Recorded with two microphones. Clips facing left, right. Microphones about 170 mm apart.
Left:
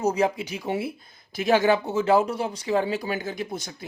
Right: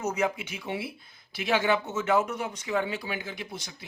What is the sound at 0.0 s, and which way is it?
Speech, 35° left (ahead or behind).